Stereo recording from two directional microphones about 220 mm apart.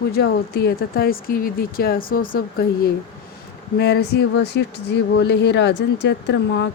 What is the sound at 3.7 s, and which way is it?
Speech, 50° left (ahead or behind).